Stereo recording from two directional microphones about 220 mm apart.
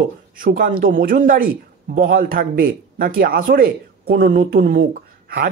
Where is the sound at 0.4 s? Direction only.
40° right (ahead or behind).